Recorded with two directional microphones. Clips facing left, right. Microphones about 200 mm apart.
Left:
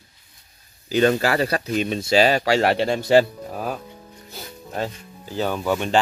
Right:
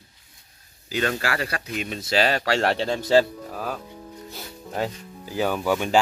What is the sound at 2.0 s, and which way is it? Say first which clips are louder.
Speech: left 4 dB; 15° left (ahead or behind).